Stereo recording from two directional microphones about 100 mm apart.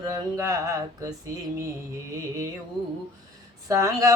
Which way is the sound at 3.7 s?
35° right (ahead or behind).